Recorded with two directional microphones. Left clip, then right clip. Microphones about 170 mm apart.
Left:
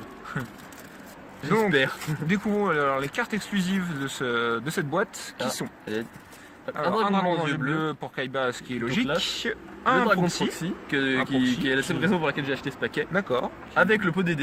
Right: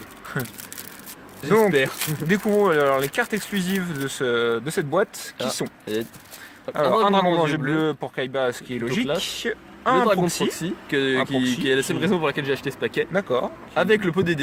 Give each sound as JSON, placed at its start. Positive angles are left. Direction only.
{"t": 0.4, "sound": "speech", "side_deg": -35}